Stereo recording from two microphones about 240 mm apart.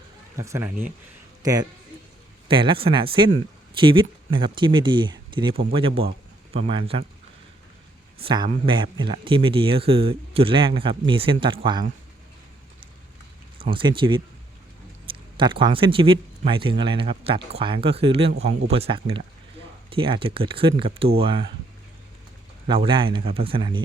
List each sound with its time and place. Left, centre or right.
0.3 s speech: centre
8.2 s speech: right
13.6 s speech: right
15.4 s speech: centre
22.6 s speech: right